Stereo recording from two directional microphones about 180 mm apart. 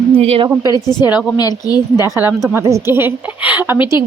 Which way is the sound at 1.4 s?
20° left (ahead or behind).